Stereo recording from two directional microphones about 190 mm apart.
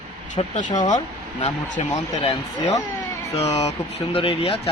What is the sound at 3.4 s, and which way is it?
Speech, 35° left (ahead or behind).